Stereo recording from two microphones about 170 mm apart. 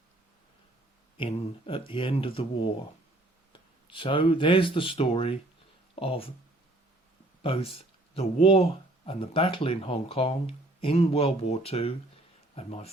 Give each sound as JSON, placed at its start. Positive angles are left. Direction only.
{"t": 1.1, "sound": "speech", "side_deg": 30}
{"t": 7.4, "sound": "speech", "side_deg": 30}